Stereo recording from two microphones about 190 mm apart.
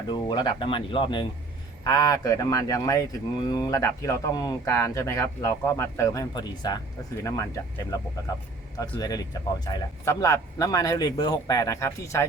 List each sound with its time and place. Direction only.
0.1 s speech: 20° left (ahead or behind)
8.8 s speech: 20° left (ahead or behind)